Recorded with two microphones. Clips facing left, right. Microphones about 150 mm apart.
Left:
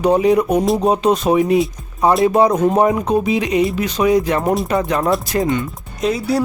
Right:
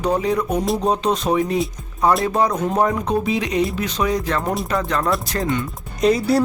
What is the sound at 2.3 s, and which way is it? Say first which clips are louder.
Speech: left 6 dB; 20° left (ahead or behind).